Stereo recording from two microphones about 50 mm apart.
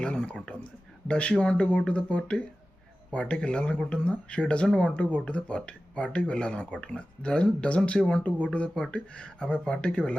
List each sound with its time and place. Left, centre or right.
0.0 s a sound: centre
1.0 s speech: left
8.5 s speech: left